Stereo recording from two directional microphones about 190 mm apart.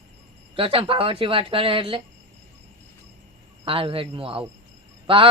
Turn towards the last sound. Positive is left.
turn(degrees=-25)  # may be behind; listen again after turning